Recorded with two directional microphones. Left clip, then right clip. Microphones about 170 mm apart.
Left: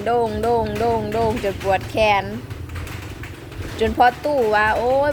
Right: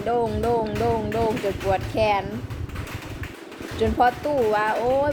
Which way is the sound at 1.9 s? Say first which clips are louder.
Left 5 dB; 15° left (ahead or behind).